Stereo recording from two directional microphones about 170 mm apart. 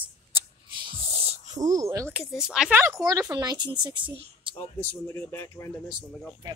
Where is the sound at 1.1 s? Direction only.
35° right (ahead or behind).